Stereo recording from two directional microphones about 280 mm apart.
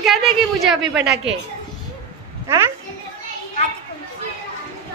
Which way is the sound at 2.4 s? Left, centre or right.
Centre.